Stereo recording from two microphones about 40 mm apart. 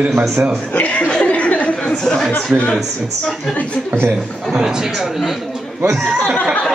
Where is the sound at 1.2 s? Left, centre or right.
Left.